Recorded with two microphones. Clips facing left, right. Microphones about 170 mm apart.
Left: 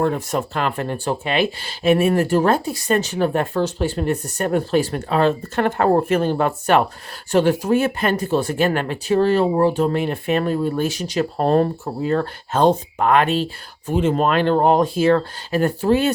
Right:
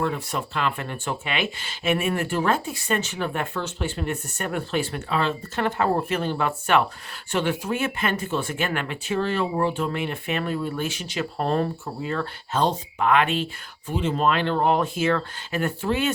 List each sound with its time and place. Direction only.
0.0 s speech: 45° left (ahead or behind)